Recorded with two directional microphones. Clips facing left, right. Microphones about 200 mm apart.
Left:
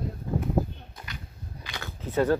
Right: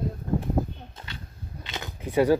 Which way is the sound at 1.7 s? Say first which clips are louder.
Right 2 dB; 15° right (ahead or behind).